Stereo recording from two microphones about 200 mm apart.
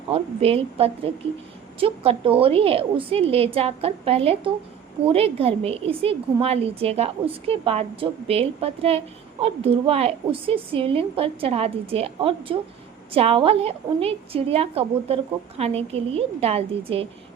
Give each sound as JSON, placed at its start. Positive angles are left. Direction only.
{"t": 0.1, "sound": "a woman's voice", "side_deg": -30}